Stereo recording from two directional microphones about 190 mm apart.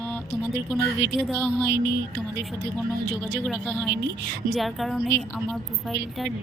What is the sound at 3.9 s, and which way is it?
Speech, 60° right (ahead or behind).